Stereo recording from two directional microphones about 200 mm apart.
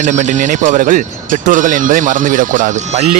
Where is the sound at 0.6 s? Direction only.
40° right (ahead or behind).